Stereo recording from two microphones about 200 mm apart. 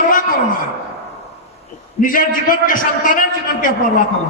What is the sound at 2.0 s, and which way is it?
A man's voice, 45° left (ahead or behind).